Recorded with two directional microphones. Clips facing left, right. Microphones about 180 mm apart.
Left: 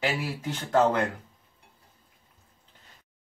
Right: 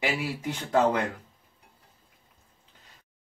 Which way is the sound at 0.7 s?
10° right (ahead or behind).